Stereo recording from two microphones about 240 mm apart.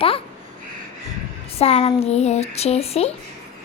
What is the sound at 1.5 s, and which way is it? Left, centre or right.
Speech, left.